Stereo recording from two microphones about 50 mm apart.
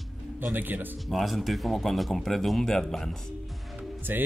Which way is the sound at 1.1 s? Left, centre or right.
Centre.